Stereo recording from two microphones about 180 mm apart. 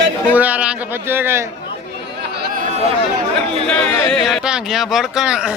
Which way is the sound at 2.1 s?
65° right (ahead or behind).